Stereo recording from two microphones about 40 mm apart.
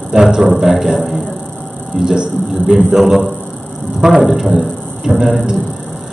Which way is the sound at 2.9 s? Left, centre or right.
Centre.